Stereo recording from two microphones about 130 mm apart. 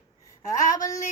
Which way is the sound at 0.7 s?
25° left (ahead or behind).